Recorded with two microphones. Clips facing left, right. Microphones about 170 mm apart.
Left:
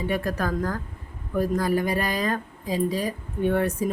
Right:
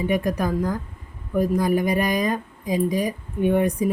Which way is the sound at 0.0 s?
15° right (ahead or behind).